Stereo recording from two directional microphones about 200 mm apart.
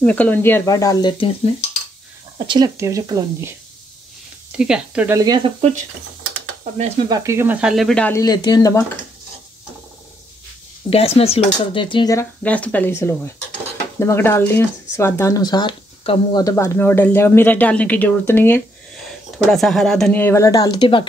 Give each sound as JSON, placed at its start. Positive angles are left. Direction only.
{"t": 0.0, "sound": "speech", "side_deg": 5}
{"t": 2.3, "sound": "speech", "side_deg": -25}
{"t": 4.6, "sound": "speech", "side_deg": -5}
{"t": 5.6, "sound": "speech", "side_deg": -35}
{"t": 7.1, "sound": "speech", "side_deg": -15}
{"t": 10.9, "sound": "speech", "side_deg": 30}
{"t": 16.4, "sound": "speech", "side_deg": 15}